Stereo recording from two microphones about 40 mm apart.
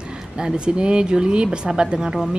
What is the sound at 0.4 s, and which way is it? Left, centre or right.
A man's voice, centre.